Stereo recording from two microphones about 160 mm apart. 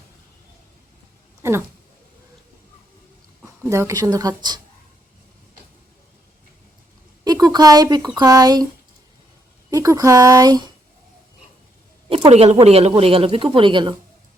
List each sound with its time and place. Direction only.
1.4 s a sound: 15° right (ahead or behind)
3.4 s speech: 15° right (ahead or behind)
7.3 s speech: 25° right (ahead or behind)
9.6 s speech: 20° right (ahead or behind)
12.0 s speech: 35° right (ahead or behind)